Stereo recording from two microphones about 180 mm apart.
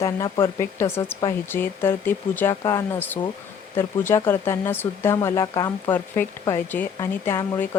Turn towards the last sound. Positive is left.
turn(degrees=15)  # may be behind; listen again after turning